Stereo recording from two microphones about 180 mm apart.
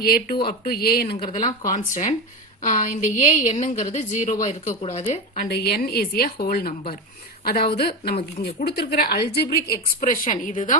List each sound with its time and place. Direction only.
0.0 s a woman's voice: 55° left (ahead or behind)
1.0 s speech: 30° left (ahead or behind)
1.7 s a woman's voice: 45° left (ahead or behind)
5.5 s a woman's voice: 60° left (ahead or behind)